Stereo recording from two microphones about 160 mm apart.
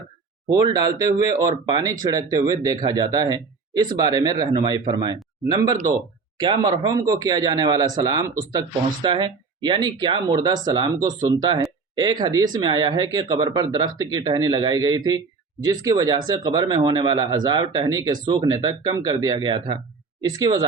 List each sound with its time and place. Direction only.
0.4 s speech: 25° right (ahead or behind)